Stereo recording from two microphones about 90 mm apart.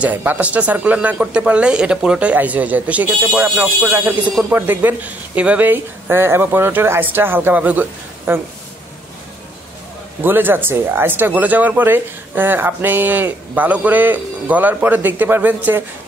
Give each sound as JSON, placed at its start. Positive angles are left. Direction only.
{"t": 0.0, "sound": "speech", "side_deg": -20}
{"t": 10.2, "sound": "speech", "side_deg": -25}